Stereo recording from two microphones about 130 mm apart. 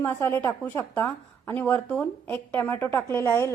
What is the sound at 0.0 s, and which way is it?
A woman's voice, 15° left (ahead or behind).